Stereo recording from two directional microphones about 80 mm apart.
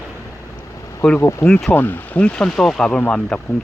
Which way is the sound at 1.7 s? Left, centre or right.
Left.